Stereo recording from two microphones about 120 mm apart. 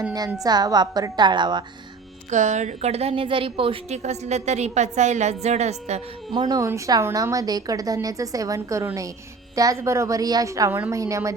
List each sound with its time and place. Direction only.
0.4 s a woman's voice: 35° right (ahead or behind)
2.3 s a woman's voice: 80° right; by 3.9 s 50° right (ahead or behind)
3.9 s a woman's voice: 70° right (ahead or behind)
6.3 s a woman's voice: 35° right (ahead or behind)
10.7 s a woman's voice: 15° right (ahead or behind)
10.9 s a woman's voice: 25° right (ahead or behind)